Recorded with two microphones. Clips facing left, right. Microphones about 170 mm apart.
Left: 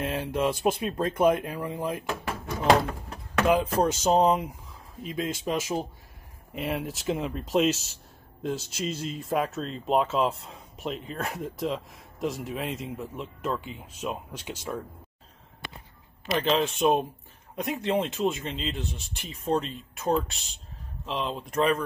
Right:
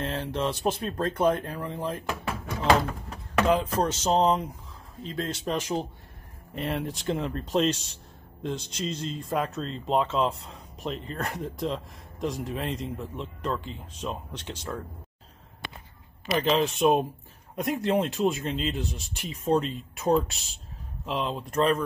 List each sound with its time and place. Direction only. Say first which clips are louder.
0.0 s speech: left 2 dB; 10° left (ahead or behind)
3.4 s speech: left 2 dB; 10° left (ahead or behind)
15.6 s a sound: right 1 dB; 60° right (ahead or behind)
16.3 s speech: right 1 dB; centre (ahead or behind)